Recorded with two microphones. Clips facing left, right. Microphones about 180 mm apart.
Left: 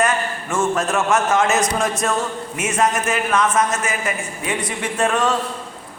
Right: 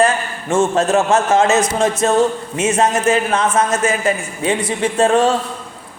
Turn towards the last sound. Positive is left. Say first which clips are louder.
# right 6 dB
turn(degrees=-30)  # may be behind; listen again after turning